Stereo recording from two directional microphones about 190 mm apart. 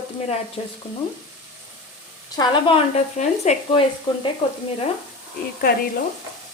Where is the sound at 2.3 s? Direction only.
25° left (ahead or behind).